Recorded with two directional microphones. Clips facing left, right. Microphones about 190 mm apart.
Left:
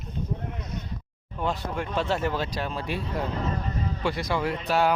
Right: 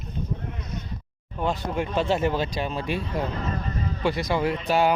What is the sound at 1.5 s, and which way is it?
Speech, centre (ahead or behind).